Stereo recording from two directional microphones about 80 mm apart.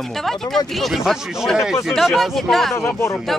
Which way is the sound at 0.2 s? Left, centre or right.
Centre.